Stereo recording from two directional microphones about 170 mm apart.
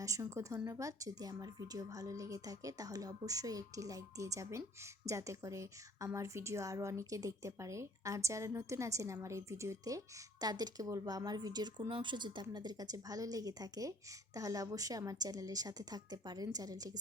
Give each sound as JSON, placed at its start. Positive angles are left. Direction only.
{"t": 0.0, "sound": "a woman's voice", "side_deg": -20}